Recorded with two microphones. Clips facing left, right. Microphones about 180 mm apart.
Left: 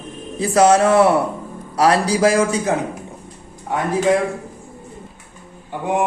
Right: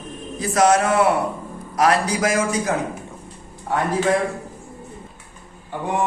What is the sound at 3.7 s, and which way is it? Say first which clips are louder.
Speech: even; 15° left (ahead or behind).